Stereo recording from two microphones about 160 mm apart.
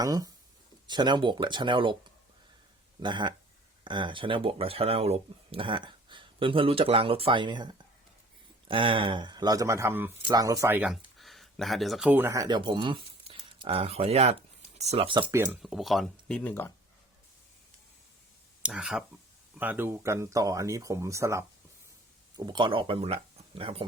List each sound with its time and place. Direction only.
0.0 s speech: 20° right (ahead or behind)
3.0 s speech: 30° right (ahead or behind)
10.8 s speech: centre (ahead or behind); by 15.3 s 35° right (ahead or behind)
15.6 s speech: centre (ahead or behind)
18.6 s speech: 5° right (ahead or behind)
22.4 s speech: 30° right (ahead or behind)